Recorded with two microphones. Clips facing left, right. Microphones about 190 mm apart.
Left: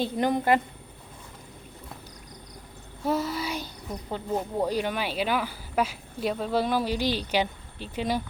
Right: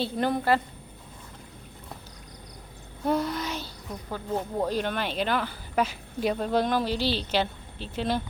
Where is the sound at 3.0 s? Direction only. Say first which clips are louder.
Right 1 dB; 5° left (ahead or behind).